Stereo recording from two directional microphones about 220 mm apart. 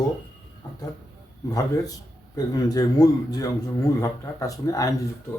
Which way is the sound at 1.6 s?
15° left (ahead or behind).